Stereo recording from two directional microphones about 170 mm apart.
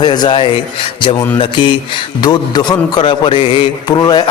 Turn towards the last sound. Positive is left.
turn(degrees=25)  # may be behind; listen again after turning